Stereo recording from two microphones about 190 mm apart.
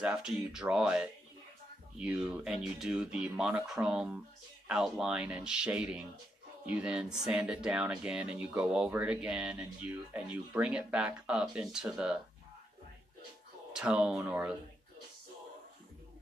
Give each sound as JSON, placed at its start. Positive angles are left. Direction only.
{"t": 0.0, "sound": "speech", "side_deg": -5}
{"t": 13.7, "sound": "speech", "side_deg": -5}